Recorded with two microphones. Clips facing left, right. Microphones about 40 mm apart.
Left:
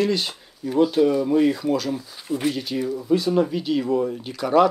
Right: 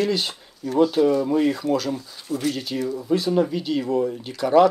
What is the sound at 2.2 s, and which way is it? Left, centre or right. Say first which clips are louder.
Speech: left 1 dB; left.